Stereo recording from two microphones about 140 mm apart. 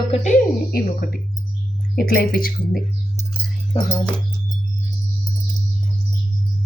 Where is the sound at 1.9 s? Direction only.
90° left.